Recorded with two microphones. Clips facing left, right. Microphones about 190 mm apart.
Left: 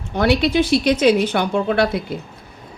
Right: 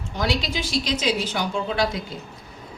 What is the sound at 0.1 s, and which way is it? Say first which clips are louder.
A woman's voice: left 9 dB; 60° left (ahead or behind).